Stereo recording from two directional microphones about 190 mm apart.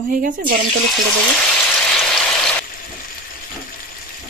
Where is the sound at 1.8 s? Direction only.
5° left (ahead or behind).